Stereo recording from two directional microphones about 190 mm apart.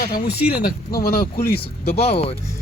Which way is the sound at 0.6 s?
55° left (ahead or behind).